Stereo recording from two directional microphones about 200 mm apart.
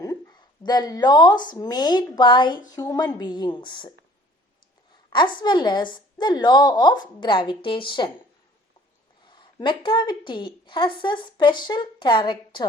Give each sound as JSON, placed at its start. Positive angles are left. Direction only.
{"t": 0.0, "sound": "a woman's voice", "side_deg": 20}
{"t": 5.1, "sound": "a woman's voice", "side_deg": 25}
{"t": 9.2, "sound": "a woman's voice", "side_deg": 20}